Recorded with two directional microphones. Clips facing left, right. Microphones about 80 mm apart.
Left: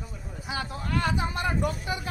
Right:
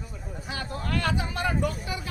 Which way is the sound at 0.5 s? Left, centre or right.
Centre.